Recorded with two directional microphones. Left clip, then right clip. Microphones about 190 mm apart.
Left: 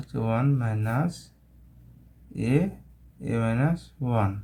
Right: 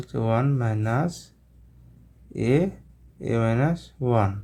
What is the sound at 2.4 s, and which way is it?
Speech, 25° right (ahead or behind).